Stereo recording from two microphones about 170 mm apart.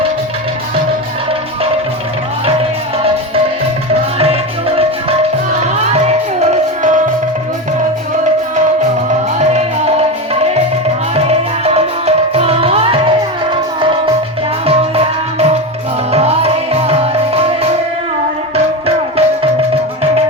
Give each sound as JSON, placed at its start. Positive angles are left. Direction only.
{"t": 2.5, "sound": "music", "side_deg": -35}
{"t": 4.2, "sound": "music", "side_deg": -35}
{"t": 9.4, "sound": "music", "side_deg": -40}
{"t": 14.7, "sound": "music", "side_deg": -40}